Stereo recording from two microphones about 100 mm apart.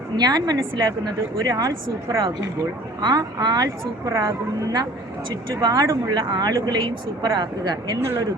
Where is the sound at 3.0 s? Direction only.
40° right (ahead or behind).